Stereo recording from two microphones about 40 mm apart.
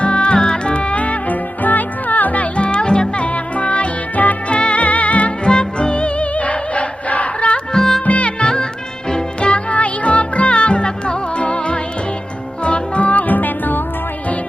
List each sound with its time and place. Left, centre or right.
0.0 s music: left
2.6 s music: left
3.2 s music: left
4.5 s music: left
4.8 s music: left
5.5 s music: left
7.7 s music: centre
8.0 s music: left
8.4 s music: left